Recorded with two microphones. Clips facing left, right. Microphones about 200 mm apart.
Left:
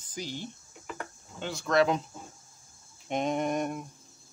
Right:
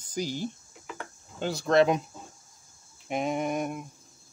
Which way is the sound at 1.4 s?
35° right (ahead or behind).